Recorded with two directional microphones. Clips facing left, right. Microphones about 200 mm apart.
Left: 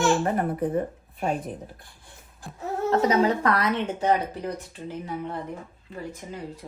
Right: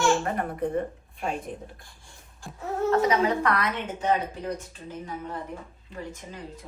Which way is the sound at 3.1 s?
40° left (ahead or behind).